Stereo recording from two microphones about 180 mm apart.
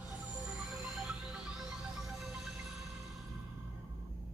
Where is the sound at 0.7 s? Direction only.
Centre (ahead or behind).